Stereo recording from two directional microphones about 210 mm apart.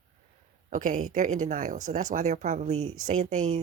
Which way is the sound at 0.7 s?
40° right (ahead or behind).